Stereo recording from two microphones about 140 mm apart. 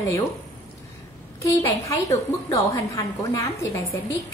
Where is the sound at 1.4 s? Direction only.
25° left (ahead or behind).